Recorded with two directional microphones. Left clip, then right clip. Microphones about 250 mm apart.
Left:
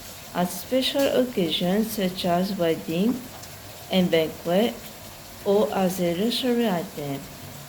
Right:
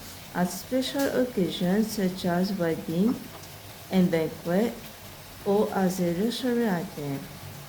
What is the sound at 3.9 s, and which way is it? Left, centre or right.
A woman's voice, centre.